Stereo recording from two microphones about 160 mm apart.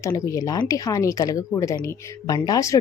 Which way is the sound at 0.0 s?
20° left (ahead or behind).